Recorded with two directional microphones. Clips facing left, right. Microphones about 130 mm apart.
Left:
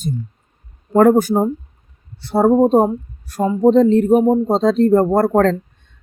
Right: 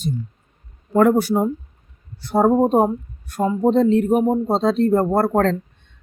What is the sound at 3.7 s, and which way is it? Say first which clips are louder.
Speech: left 4 dB; 40° left (ahead or behind).